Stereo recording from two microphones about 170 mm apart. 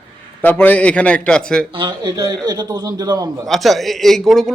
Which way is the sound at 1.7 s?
30° right (ahead or behind).